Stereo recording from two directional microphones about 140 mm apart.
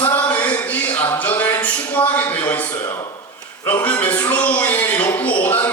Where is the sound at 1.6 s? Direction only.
10° left (ahead or behind).